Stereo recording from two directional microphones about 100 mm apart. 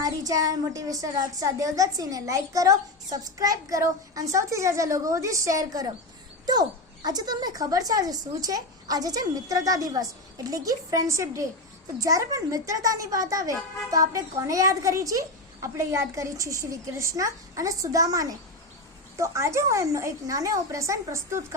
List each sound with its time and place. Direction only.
0.0 s a woman's voice: 35° right (ahead or behind)